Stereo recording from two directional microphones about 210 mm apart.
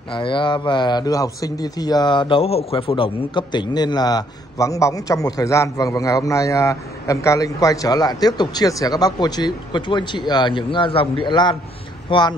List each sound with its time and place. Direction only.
0.1 s speech: 25° left (ahead or behind)